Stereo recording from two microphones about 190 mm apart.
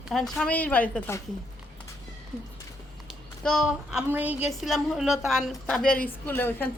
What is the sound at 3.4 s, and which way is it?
A woman's voice, centre (ahead or behind).